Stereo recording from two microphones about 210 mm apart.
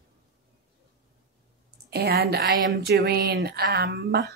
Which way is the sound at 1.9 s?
50° right (ahead or behind).